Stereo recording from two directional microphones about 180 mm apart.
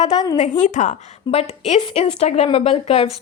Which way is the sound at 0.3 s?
40° left (ahead or behind).